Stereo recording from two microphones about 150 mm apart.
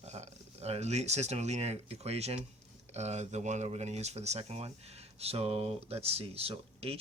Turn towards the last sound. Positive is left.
turn(degrees=-40)  # may be behind; listen again after turning